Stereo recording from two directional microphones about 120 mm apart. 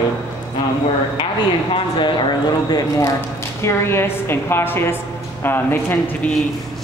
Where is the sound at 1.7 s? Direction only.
40° left (ahead or behind).